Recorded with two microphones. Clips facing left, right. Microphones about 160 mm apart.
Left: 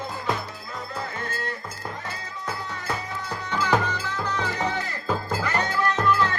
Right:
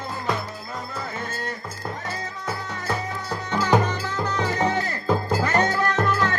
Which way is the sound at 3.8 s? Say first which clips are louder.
Right 2 dB; 45° right (ahead or behind).